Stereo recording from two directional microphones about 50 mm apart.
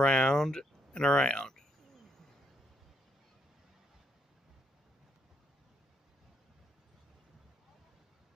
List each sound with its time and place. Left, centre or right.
0.0 s speech: centre